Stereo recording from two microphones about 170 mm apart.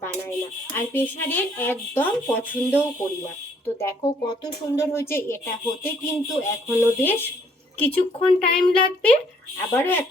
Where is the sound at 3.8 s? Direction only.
20° left (ahead or behind).